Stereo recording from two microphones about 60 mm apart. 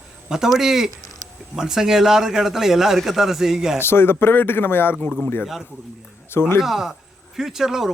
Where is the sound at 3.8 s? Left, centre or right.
Left.